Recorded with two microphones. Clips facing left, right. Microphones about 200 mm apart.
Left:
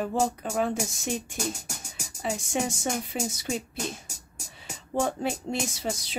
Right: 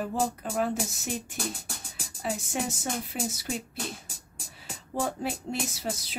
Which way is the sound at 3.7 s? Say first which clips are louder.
Left 3 dB; 45° left (ahead or behind).